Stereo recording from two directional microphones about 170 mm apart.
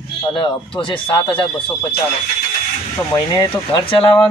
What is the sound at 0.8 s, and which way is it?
Speech, 30° left (ahead or behind).